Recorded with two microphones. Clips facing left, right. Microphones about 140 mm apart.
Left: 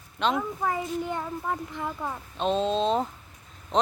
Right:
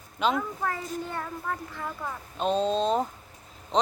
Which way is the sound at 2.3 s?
Centre (ahead or behind).